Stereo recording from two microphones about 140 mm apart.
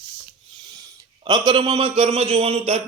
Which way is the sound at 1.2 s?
30° right (ahead or behind).